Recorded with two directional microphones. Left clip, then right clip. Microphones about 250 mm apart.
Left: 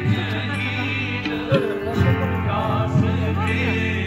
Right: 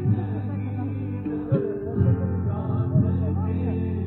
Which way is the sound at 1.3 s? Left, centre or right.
Centre.